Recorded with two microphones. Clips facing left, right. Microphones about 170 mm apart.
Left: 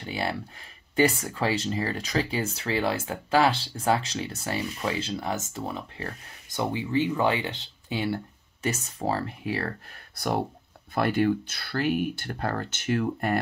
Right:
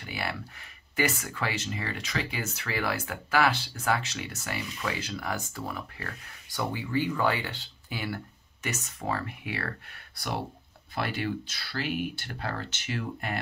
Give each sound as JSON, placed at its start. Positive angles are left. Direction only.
{"t": 0.0, "sound": "speech", "side_deg": 30}
{"t": 10.1, "sound": "speech", "side_deg": 50}